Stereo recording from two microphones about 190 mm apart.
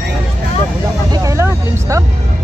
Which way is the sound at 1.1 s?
15° right (ahead or behind).